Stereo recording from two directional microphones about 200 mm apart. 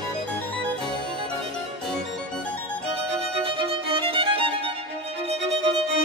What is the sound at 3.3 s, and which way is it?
Music, 25° right (ahead or behind).